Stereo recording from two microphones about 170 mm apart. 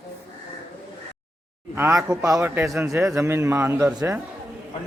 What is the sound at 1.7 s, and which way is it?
A man's voice, 15° right (ahead or behind).